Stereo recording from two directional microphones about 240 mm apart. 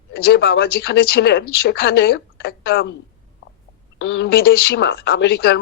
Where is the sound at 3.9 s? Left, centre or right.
Left.